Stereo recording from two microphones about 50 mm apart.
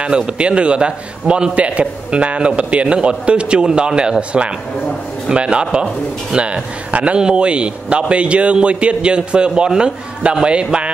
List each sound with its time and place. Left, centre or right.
0.0 s a man's voice: right